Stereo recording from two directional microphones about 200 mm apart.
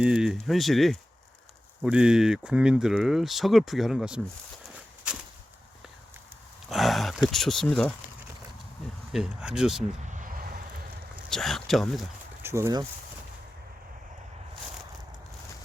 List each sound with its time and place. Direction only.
0.0 s speech: 5° right (ahead or behind)
5.1 s a sound: 5° right (ahead or behind)
6.7 s speech: centre (ahead or behind)
9.1 s speech: 5° right (ahead or behind)
10.1 s a sound: 40° right (ahead or behind)
11.3 s speech: centre (ahead or behind)
12.4 s speech: 15° right (ahead or behind)